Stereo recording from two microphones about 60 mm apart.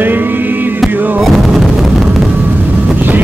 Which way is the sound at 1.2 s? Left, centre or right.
Centre.